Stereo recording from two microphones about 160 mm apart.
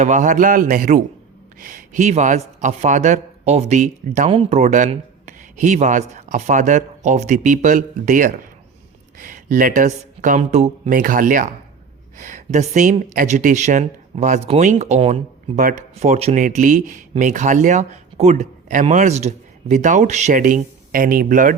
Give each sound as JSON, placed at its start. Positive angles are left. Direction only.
{"t": 0.0, "sound": "speech", "side_deg": -50}
{"t": 4.3, "sound": "speech", "side_deg": -40}
{"t": 10.9, "sound": "speech", "side_deg": -60}
{"t": 16.4, "sound": "speech", "side_deg": -55}